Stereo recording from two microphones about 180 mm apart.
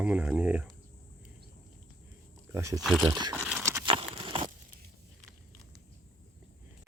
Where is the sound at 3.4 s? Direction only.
Centre (ahead or behind).